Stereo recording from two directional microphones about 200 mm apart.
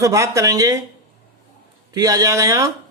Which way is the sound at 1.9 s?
20° right (ahead or behind).